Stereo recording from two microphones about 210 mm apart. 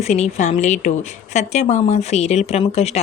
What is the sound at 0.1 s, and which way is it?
A woman's voice, 35° left (ahead or behind).